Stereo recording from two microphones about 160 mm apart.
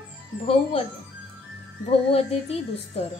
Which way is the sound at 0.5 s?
35° left (ahead or behind).